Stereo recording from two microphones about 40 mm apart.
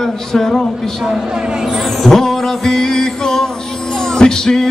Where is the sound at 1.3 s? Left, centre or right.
Right.